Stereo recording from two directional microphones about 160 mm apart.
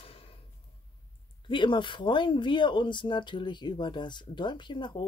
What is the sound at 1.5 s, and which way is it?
Speech, 30° left (ahead or behind).